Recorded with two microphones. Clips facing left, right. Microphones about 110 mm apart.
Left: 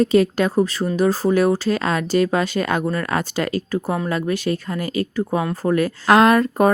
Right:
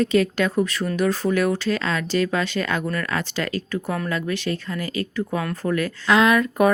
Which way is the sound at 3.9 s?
30° left (ahead or behind).